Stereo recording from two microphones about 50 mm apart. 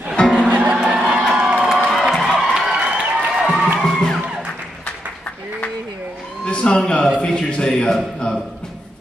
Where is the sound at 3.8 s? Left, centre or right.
Centre.